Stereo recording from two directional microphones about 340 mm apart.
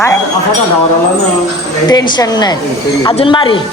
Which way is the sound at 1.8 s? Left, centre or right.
Centre.